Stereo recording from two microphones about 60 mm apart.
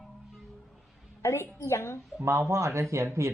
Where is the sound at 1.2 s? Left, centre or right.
Left.